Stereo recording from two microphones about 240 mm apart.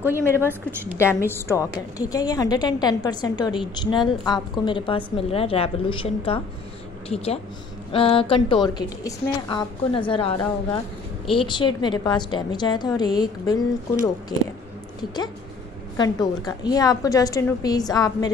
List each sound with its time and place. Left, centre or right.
0.4 s a woman's voice: centre
1.2 s a woman's voice: centre
16.0 s a woman's voice: centre